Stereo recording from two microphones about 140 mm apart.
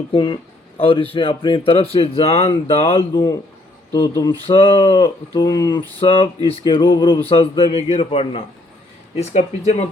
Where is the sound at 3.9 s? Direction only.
25° left (ahead or behind).